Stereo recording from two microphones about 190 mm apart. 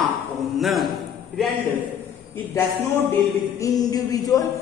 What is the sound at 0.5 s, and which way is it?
Speech, centre (ahead or behind).